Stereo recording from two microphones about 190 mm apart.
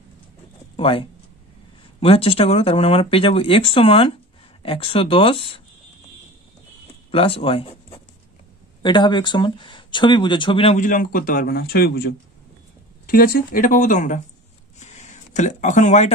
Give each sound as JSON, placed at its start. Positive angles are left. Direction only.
{"t": 0.7, "sound": "speech", "side_deg": 30}
{"t": 7.1, "sound": "speech", "side_deg": 30}
{"t": 10.8, "sound": "a man's voice", "side_deg": 45}
{"t": 14.8, "sound": "a sound", "side_deg": 40}